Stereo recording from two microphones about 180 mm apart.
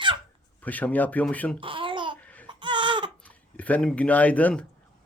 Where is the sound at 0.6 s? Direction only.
10° left (ahead or behind).